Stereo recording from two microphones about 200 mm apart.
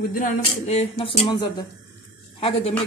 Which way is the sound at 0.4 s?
30° left (ahead or behind).